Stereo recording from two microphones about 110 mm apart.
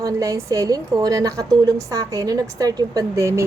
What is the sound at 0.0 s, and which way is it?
A woman's voice, 30° right (ahead or behind).